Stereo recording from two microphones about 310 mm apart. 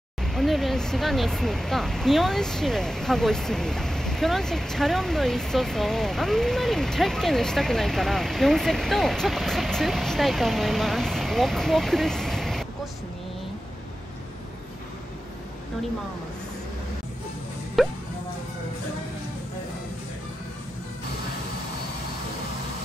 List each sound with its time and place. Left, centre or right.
0.2 s speech: centre
17.8 s music: centre